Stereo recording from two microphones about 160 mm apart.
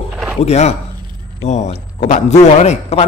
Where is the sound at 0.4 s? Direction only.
40° left (ahead or behind).